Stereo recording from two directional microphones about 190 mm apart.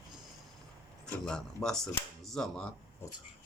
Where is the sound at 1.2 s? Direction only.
5° left (ahead or behind).